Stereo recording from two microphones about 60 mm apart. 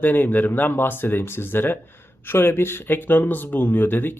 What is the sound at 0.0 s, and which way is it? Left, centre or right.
Speech, left.